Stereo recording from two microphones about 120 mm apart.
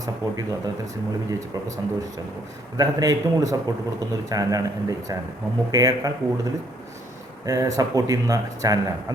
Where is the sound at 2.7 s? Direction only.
30° right (ahead or behind).